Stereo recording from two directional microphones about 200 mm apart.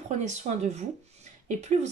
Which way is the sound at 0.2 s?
35° right (ahead or behind).